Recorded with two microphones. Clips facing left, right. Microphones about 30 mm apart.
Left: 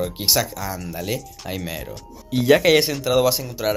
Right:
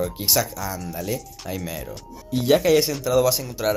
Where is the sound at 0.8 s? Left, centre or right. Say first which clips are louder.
Left 1 dB; centre.